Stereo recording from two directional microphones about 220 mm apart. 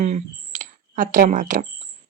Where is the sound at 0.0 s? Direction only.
35° right (ahead or behind).